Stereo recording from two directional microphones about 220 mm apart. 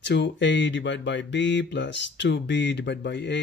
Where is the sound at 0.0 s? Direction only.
50° left (ahead or behind).